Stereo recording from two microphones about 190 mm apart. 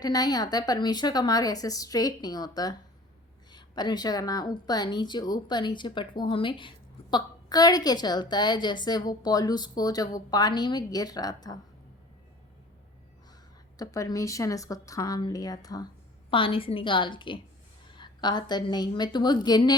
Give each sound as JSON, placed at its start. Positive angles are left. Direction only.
{"t": 0.0, "sound": "a woman's voice", "side_deg": 20}
{"t": 3.5, "sound": "a woman's voice", "side_deg": 20}
{"t": 13.7, "sound": "a woman's voice", "side_deg": 20}